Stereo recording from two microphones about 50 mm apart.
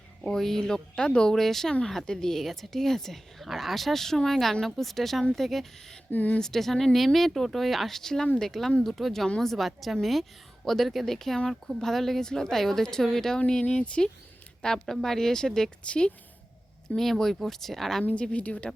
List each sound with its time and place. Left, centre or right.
0.3 s a woman's voice: centre
1.3 s a woman's voice: centre
6.1 s speech: left
6.4 s a woman's voice: centre
13.5 s a woman's voice: left
14.6 s a woman's voice: centre
15.8 s a woman's voice: left
16.9 s speech: centre
18.0 s a woman's voice: left